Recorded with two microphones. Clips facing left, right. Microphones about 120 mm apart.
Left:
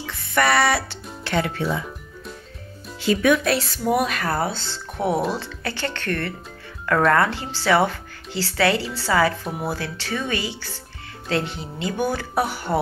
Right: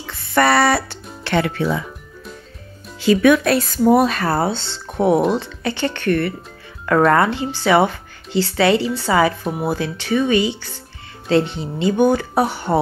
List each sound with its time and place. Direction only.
0.0 s music: 35° right (ahead or behind)
1.2 s speech: 75° right (ahead or behind)
3.0 s speech: 80° right
3.5 s speech: 40° right (ahead or behind); by 12.7 s 25° right (ahead or behind)